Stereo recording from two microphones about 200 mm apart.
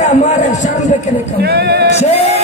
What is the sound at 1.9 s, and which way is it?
Music, 35° left (ahead or behind).